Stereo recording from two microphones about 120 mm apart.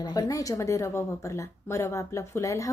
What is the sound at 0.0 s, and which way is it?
Speech, 30° left (ahead or behind).